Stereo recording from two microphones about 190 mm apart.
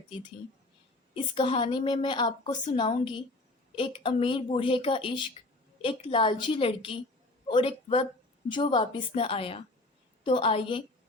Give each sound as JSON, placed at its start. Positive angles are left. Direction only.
{"t": 1.1, "sound": "a woman's voice", "side_deg": 25}